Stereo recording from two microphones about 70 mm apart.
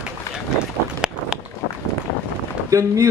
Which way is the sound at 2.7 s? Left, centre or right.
Right.